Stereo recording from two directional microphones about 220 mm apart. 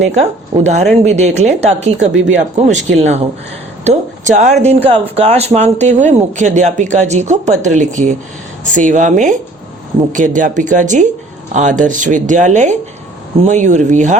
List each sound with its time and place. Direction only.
0.0 s a woman's voice: 30° right (ahead or behind)